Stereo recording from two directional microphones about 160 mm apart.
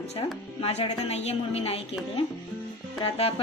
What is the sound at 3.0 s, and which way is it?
Speech, 35° left (ahead or behind).